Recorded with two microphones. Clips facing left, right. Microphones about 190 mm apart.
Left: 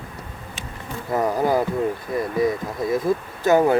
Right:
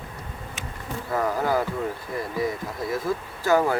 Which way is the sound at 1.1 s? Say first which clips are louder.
Left 4 dB; 20° left (ahead or behind).